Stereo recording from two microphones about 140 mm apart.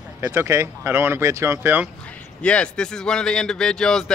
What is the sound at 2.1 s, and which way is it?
Speech, 10° left (ahead or behind).